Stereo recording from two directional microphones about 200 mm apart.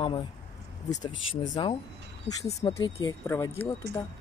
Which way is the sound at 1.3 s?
25° left (ahead or behind).